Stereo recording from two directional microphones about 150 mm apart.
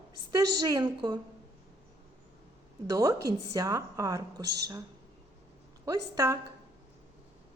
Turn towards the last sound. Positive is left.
turn(degrees=-25)  # may be behind; listen again after turning